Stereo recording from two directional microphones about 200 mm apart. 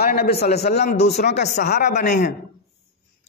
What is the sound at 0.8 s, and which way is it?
A man's voice, 35° left (ahead or behind).